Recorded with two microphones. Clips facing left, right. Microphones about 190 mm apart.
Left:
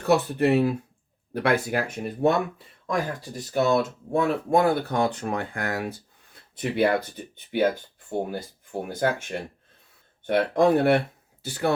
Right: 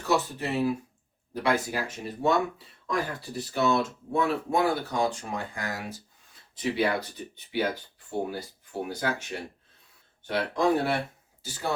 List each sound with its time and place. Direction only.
0.0 s speech: 60° left (ahead or behind)
2.8 s speech: 45° left (ahead or behind)
8.9 s speech: 50° left (ahead or behind)